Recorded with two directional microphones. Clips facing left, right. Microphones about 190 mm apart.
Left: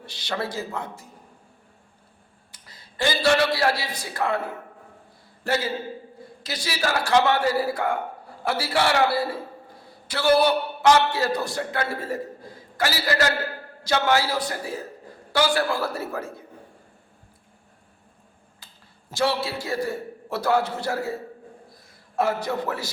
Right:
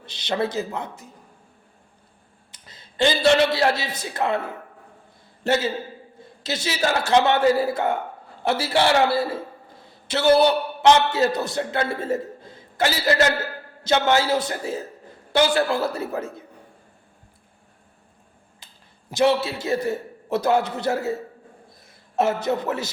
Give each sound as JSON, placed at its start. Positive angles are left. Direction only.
{"t": 0.0, "sound": "a man's voice", "side_deg": -20}
{"t": 2.5, "sound": "a man's voice", "side_deg": -20}
{"t": 5.4, "sound": "a man's voice", "side_deg": -25}
{"t": 18.6, "sound": "a sound", "side_deg": -20}
{"t": 19.1, "sound": "a man's voice", "side_deg": -20}
{"t": 22.1, "sound": "a man's voice", "side_deg": -25}